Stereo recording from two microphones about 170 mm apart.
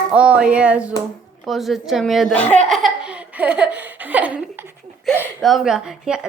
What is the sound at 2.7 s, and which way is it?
Laughter, 5° right (ahead or behind).